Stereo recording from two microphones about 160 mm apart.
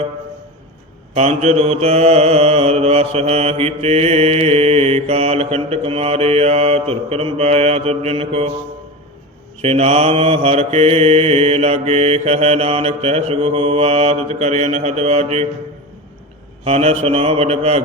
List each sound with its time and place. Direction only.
1.1 s mantra: 45° right (ahead or behind)
9.6 s mantra: 40° right (ahead or behind)
16.6 s mantra: 40° right (ahead or behind)